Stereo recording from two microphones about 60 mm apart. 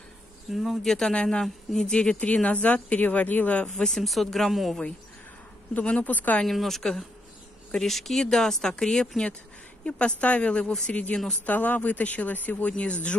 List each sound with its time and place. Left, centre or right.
0.5 s speech: centre
0.9 s speech: centre
3.6 s speech: centre
5.9 s speech: left
6.4 s speech: centre; by 13.1 s left